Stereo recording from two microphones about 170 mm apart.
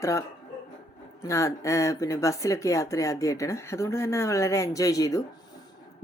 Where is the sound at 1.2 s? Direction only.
15° left (ahead or behind).